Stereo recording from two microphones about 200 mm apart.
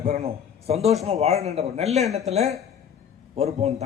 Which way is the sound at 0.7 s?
30° right (ahead or behind).